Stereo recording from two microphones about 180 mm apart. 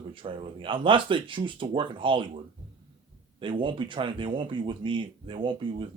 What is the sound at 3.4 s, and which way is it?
Speech, 25° right (ahead or behind).